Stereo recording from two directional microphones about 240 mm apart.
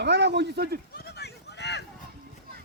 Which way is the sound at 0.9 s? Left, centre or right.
Left.